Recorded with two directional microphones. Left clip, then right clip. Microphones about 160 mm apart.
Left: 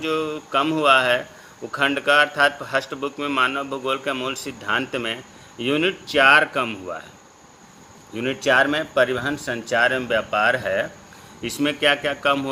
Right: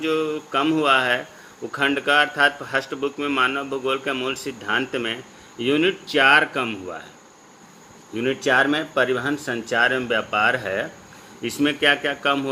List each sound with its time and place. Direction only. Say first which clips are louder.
0.0 s a man's voice: right 1 dB; 40° left (ahead or behind)
8.1 s a man's voice: left 1 dB; 40° left (ahead or behind)